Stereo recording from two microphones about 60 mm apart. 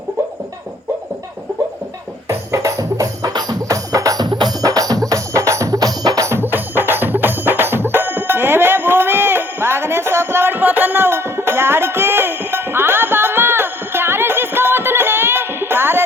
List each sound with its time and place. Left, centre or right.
2.5 s music: right
6.2 s music: right